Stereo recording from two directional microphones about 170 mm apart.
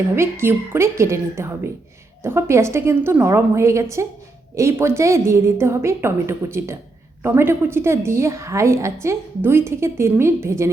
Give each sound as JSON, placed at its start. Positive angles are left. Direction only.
{"t": 0.2, "sound": "a woman's voice", "side_deg": -15}